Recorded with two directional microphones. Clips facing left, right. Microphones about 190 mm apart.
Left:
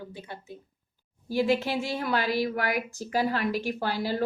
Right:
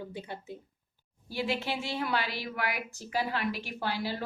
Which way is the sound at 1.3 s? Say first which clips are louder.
Left 7 dB; 45° left (ahead or behind).